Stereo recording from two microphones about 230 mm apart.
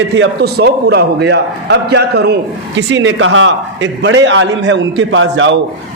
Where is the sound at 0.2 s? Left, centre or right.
Right.